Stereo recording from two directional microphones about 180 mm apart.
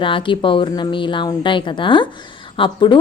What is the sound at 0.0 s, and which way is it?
A woman's voice, 25° left (ahead or behind).